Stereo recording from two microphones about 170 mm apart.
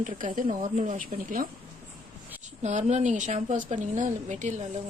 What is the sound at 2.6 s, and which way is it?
Speech, 45° right (ahead or behind).